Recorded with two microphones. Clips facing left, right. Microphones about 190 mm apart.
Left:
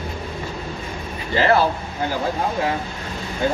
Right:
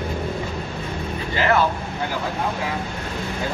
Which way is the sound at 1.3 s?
35° left (ahead or behind).